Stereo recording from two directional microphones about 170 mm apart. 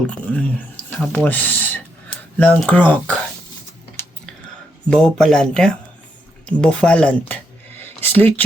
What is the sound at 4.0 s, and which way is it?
Typing, 15° left (ahead or behind).